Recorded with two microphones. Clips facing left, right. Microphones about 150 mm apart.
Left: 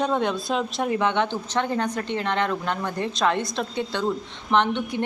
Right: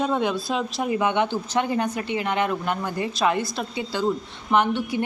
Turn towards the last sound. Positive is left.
turn(degrees=-5)  # may be behind; listen again after turning